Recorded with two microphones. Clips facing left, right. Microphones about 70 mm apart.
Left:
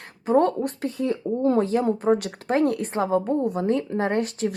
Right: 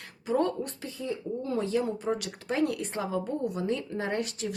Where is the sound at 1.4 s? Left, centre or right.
Left.